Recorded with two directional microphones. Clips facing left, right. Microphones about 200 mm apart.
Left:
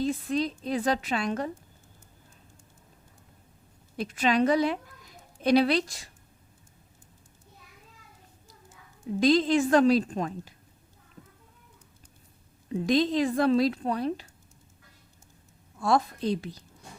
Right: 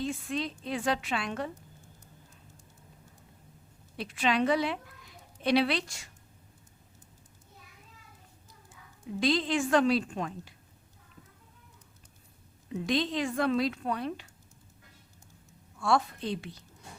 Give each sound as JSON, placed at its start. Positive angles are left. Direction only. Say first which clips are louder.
{"t": 0.0, "sound": "a woman's voice", "louder": "left 5 dB", "side_deg": 35}
{"t": 3.9, "sound": "a woman's voice", "louder": "left 4 dB", "side_deg": 40}
{"t": 9.2, "sound": "a woman's voice", "louder": "left 6 dB", "side_deg": 40}
{"t": 12.7, "sound": "a woman's voice", "louder": "left 6 dB", "side_deg": 40}
{"t": 15.8, "sound": "a woman's voice", "louder": "left 3 dB", "side_deg": 35}